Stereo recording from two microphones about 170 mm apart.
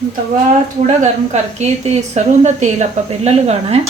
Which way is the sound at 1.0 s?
40° right (ahead or behind).